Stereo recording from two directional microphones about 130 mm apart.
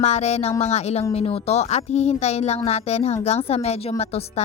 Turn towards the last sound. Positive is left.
turn(degrees=55)  # may be behind; listen again after turning